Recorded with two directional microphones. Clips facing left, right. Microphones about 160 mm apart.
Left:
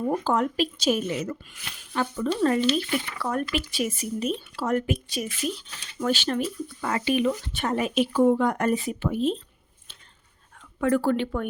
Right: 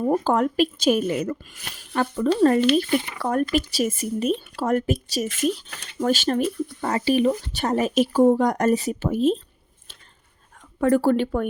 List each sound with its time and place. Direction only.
0.0 s speech: 40° right (ahead or behind); by 5.9 s 60° right (ahead or behind)
6.0 s speech: 45° right (ahead or behind)
10.8 s speech: 40° right (ahead or behind)